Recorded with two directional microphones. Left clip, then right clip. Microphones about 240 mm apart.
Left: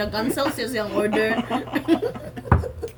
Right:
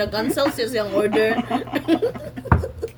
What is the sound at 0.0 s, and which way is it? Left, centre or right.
Speech, centre.